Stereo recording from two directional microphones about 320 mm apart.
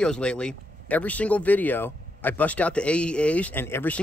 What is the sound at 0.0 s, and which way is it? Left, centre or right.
Speech, centre.